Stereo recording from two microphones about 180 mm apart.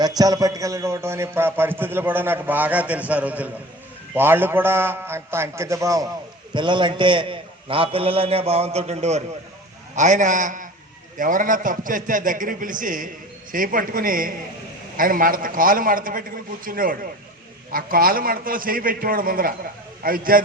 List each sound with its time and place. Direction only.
0.0 s a man's voice: 20° right (ahead or behind); by 20.4 s 50° right (ahead or behind)